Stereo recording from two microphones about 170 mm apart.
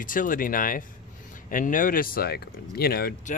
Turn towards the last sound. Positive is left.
turn(degrees=60)  # may be behind; listen again after turning